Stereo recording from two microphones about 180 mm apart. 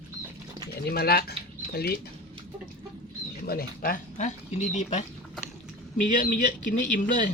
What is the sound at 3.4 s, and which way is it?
A man's voice, 55° left (ahead or behind).